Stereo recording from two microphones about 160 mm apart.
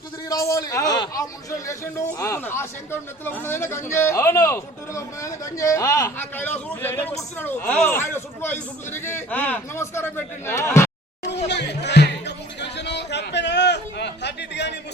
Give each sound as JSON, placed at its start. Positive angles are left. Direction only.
{"t": 0.3, "sound": "a man's voice", "side_deg": 20}
{"t": 11.4, "sound": "music", "side_deg": 90}